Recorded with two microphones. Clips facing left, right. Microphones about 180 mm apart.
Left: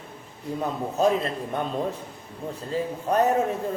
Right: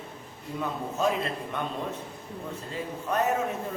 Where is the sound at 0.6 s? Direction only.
40° left (ahead or behind).